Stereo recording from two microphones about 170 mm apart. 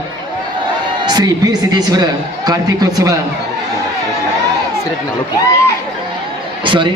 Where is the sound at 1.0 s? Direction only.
25° right (ahead or behind).